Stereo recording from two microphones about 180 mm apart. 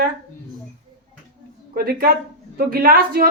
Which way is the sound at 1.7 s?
60° right (ahead or behind).